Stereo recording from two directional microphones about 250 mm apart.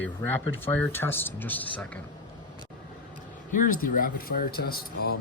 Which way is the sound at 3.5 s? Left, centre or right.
Left.